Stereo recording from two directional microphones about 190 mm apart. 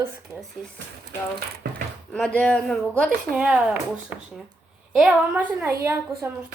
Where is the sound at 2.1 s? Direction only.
5° left (ahead or behind).